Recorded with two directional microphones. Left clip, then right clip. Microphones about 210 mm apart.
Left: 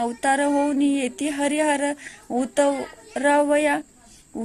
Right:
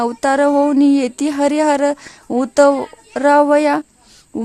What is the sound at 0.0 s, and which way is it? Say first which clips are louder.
A woman's voice: right 7 dB; 25° right (ahead or behind).